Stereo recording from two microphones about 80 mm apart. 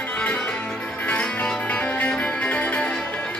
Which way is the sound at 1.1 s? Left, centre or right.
Centre.